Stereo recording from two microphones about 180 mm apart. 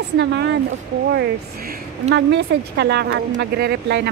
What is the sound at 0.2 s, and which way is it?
Speech, 75° right (ahead or behind).